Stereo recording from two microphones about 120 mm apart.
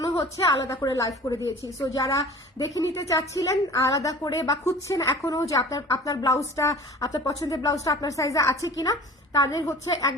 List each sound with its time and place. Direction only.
0.0 s a woman's voice: 30° left (ahead or behind)